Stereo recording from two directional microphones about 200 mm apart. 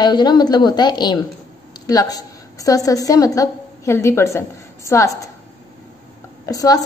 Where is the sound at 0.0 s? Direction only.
20° left (ahead or behind).